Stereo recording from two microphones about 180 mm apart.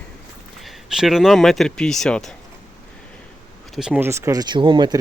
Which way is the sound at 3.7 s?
5° right (ahead or behind).